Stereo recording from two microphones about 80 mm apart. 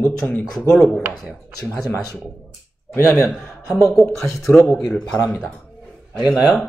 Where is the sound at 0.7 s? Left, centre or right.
Centre.